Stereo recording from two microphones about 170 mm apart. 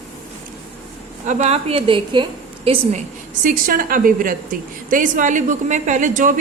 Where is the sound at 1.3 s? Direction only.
40° right (ahead or behind).